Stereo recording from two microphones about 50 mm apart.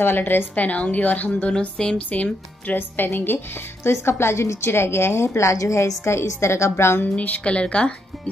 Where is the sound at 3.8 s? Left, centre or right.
Left.